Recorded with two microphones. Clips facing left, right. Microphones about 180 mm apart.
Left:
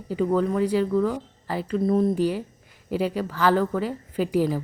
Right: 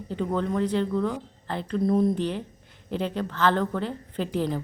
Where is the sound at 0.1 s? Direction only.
5° left (ahead or behind).